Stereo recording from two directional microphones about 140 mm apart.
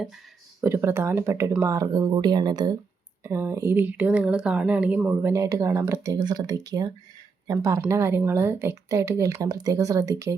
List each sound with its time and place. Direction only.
0.6 s speech: 20° right (ahead or behind)
3.2 s speech: 20° right (ahead or behind)
5.3 s speech: 20° right (ahead or behind)